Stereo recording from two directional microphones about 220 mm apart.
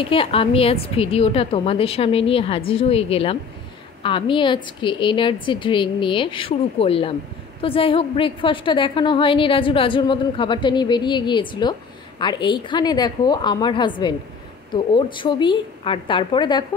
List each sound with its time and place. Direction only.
0.0 s a woman's voice: 25° left (ahead or behind)